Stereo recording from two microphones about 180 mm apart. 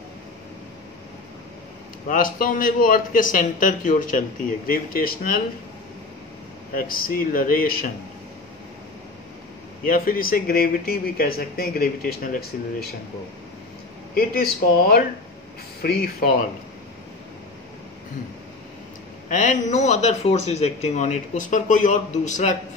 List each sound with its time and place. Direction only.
2.0 s a man's voice: 50° left (ahead or behind)
6.7 s a man's voice: 50° left (ahead or behind)
9.8 s speech: 55° left (ahead or behind)
14.1 s speech: 55° left (ahead or behind)
19.2 s speech: 45° left (ahead or behind)